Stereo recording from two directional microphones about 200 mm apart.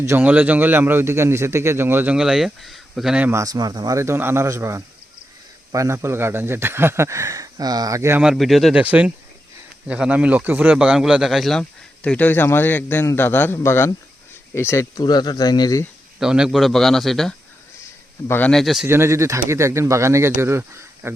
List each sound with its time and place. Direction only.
0.0 s a man's voice: 10° right (ahead or behind); by 15.9 s 20° left (ahead or behind)
16.2 s a man's voice: 5° right (ahead or behind)
18.9 s a man's voice: 15° right (ahead or behind)